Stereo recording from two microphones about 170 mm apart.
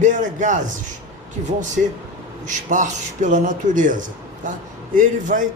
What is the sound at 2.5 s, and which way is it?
Speech, 45° right (ahead or behind).